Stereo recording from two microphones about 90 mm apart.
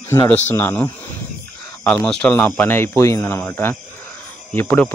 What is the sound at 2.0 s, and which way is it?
Speech, 10° left (ahead or behind).